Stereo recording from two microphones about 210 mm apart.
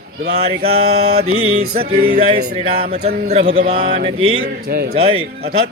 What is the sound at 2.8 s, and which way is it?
Speech, 45° right (ahead or behind).